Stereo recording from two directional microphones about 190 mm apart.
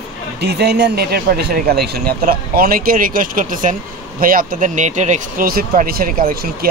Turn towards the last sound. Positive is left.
turn(degrees=-50)  # may be behind; listen again after turning